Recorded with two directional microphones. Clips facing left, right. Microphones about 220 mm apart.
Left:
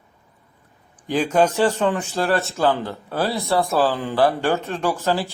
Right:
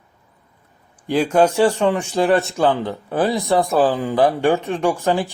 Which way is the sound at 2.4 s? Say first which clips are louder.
Right 2 dB; 15° right (ahead or behind).